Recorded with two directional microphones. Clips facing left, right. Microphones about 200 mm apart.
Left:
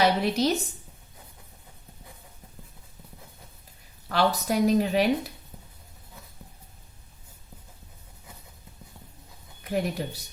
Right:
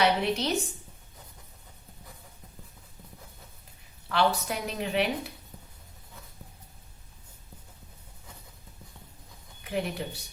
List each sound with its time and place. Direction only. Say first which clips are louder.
0.0 s a sound: left 3 dB; 40° left (ahead or behind)
4.1 s speech: left 2 dB; 40° left (ahead or behind)
9.6 s speech: left 3 dB; 40° left (ahead or behind)